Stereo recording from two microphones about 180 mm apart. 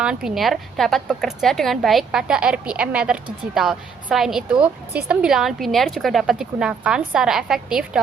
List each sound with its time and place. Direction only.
0.0 s a woman's voice: 5° right (ahead or behind)